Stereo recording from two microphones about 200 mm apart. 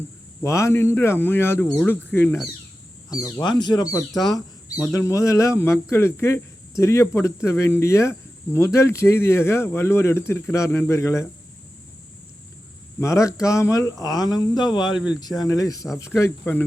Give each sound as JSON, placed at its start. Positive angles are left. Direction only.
{"t": 0.4, "sound": "speech", "side_deg": 15}
{"t": 4.1, "sound": "speech", "side_deg": 0}
{"t": 4.8, "sound": "speech", "side_deg": 15}
{"t": 13.0, "sound": "speech", "side_deg": 15}
{"t": 14.9, "sound": "speech", "side_deg": -5}
{"t": 15.2, "sound": "speech", "side_deg": 20}